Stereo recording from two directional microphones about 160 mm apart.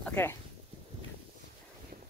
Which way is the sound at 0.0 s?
10° left (ahead or behind).